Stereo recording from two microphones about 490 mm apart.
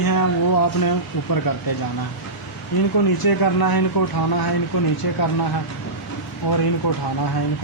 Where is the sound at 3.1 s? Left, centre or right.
Left.